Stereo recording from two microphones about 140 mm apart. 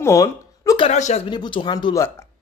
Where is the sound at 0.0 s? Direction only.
25° left (ahead or behind).